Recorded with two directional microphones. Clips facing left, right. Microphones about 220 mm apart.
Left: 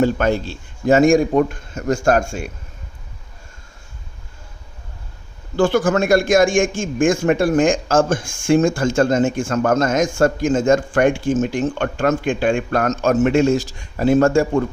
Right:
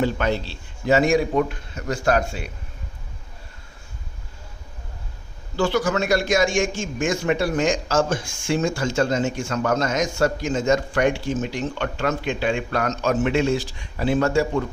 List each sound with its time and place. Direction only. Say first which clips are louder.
0.0 s a man's voice: left 5 dB; 45° left (ahead or behind)
5.5 s a man's voice: left 5 dB; 50° left (ahead or behind)